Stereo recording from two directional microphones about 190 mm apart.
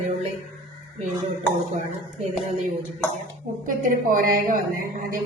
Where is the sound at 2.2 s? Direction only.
40° right (ahead or behind).